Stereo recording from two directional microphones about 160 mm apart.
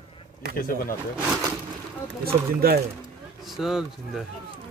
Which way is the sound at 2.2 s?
70° right (ahead or behind).